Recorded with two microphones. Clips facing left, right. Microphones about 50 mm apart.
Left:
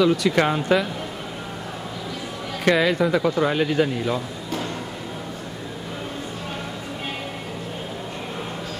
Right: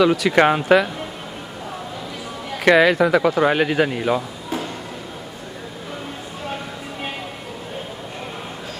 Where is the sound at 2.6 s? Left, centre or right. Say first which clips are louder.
Right 5 dB; right.